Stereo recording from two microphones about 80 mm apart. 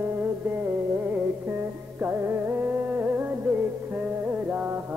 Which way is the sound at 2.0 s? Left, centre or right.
Right.